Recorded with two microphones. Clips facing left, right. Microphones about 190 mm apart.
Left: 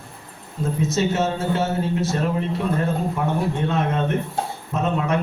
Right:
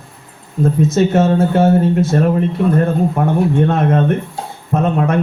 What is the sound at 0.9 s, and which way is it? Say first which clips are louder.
A man's voice: right 8 dB; 55° right (ahead or behind).